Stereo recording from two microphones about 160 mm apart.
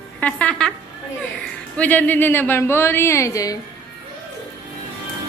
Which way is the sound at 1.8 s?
10° left (ahead or behind).